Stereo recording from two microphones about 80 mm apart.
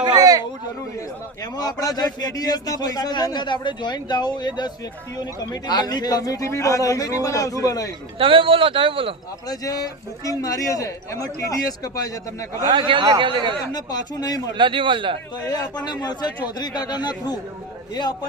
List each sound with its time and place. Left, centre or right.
0.0 s a sound: right
1.5 s a man's voice: left
8.2 s speech: right
9.5 s a man's voice: left
12.6 s speech: right
13.7 s a man's voice: left
14.6 s speech: right
15.4 s a man's voice: left